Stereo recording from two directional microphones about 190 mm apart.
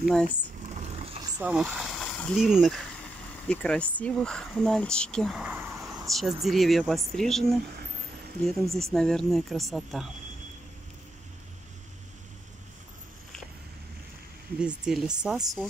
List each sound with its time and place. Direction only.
0.0 s speech: 5° left (ahead or behind)
0.7 s vehicle: 35° right (ahead or behind)
1.4 s speech: 5° right (ahead or behind)
6.0 s speech: centre (ahead or behind)
8.7 s speech: centre (ahead or behind)
14.6 s speech: 5° right (ahead or behind)